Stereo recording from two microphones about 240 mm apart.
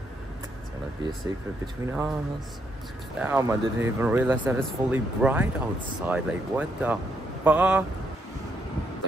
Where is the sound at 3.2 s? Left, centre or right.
Centre.